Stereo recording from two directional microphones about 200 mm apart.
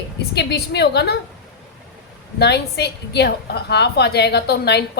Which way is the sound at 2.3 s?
55° left (ahead or behind).